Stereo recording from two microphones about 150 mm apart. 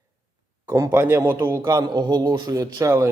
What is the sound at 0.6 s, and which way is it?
A man's voice, 20° right (ahead or behind).